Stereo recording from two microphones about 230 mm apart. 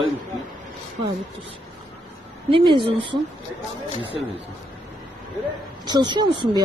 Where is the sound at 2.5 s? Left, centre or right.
Centre.